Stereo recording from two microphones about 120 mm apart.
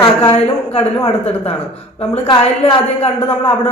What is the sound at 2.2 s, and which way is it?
Speech, 40° left (ahead or behind).